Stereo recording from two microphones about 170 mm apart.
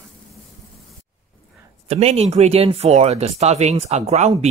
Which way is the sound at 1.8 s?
40° right (ahead or behind).